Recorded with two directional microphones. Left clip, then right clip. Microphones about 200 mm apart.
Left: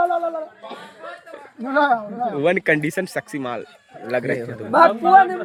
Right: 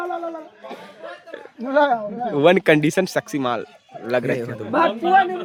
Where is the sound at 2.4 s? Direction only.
30° right (ahead or behind).